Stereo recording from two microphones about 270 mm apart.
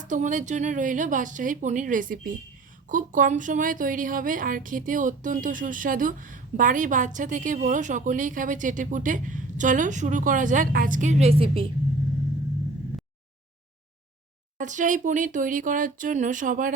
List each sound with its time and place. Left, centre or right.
0.0 s speech: right
14.6 s speech: right